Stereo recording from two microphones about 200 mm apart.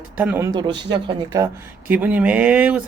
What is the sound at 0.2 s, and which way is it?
A man's voice, 10° right (ahead or behind).